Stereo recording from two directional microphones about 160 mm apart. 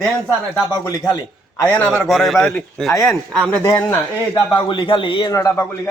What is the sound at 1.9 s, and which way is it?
A man's voice, centre (ahead or behind).